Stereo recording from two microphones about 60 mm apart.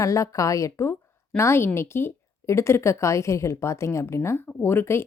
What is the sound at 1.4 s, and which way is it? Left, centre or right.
A woman's voice, left.